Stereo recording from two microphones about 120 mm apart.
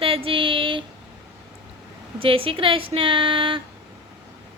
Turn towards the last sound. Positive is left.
turn(degrees=-45)  # may be behind; listen again after turning